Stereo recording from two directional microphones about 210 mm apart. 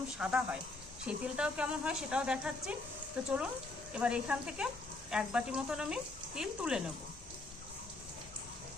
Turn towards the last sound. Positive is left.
turn(degrees=-5)  # may be behind; listen again after turning